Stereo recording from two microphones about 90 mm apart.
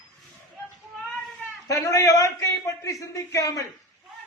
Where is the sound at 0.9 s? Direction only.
5° left (ahead or behind).